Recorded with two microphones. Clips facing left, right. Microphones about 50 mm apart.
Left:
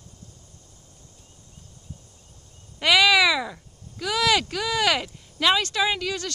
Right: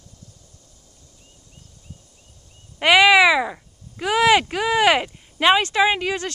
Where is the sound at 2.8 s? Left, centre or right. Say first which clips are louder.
Right 5 dB; right.